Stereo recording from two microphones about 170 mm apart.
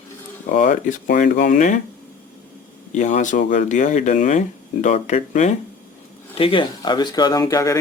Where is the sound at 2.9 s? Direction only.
45° left (ahead or behind).